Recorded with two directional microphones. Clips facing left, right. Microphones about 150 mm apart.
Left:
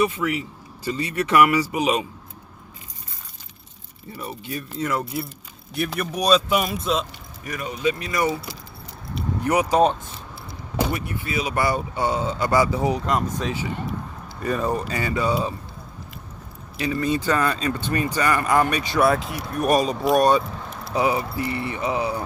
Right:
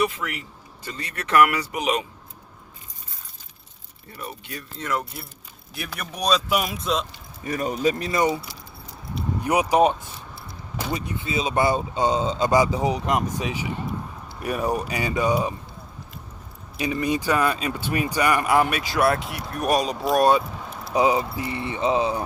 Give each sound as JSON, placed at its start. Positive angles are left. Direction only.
{"t": 0.0, "sound": "speech", "side_deg": 0}
{"t": 4.2, "sound": "speech", "side_deg": 5}
{"t": 7.4, "sound": "speech", "side_deg": -35}
{"t": 9.4, "sound": "speech", "side_deg": -15}
{"t": 16.7, "sound": "speech", "side_deg": -15}
{"t": 20.1, "sound": "keys jangling", "side_deg": -5}
{"t": 20.9, "sound": "speech", "side_deg": -20}